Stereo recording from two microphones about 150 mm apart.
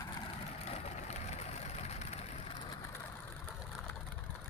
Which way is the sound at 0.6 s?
45° left (ahead or behind).